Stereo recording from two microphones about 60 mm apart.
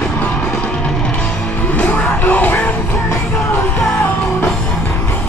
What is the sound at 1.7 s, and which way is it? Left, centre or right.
Music, left.